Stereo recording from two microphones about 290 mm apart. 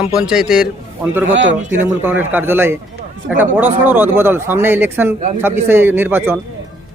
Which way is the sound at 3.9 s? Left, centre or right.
Centre.